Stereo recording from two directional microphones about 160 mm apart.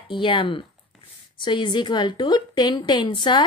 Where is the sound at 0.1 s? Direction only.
30° left (ahead or behind).